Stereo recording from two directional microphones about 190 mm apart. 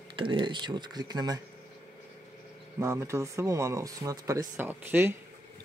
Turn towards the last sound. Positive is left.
turn(degrees=-10)  # may be behind; listen again after turning